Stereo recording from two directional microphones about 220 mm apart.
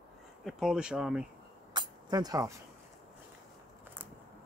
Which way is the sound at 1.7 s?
15° right (ahead or behind).